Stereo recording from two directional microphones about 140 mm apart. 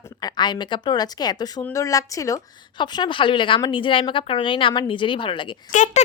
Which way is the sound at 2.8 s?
35° left (ahead or behind).